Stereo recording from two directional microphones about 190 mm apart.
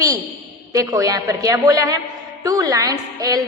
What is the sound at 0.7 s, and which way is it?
A woman's voice, 20° right (ahead or behind).